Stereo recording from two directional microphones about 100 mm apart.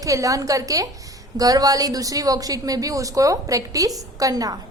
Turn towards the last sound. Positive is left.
turn(degrees=-40)  # may be behind; listen again after turning